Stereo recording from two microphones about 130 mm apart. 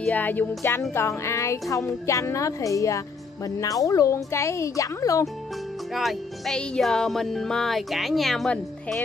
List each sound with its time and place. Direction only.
0.0 s a woman's voice: 15° left (ahead or behind)
5.9 s speech: centre (ahead or behind)